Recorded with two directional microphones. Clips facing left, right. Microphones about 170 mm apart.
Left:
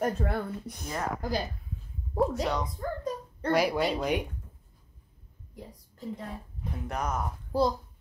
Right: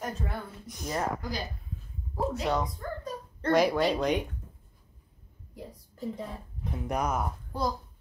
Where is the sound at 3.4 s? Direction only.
10° left (ahead or behind).